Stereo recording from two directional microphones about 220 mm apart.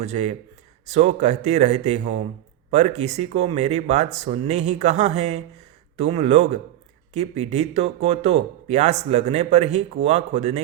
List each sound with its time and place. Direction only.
0.0 s speech: 30° right (ahead or behind)